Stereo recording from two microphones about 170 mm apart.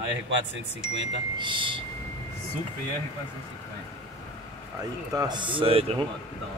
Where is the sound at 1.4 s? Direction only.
30° right (ahead or behind).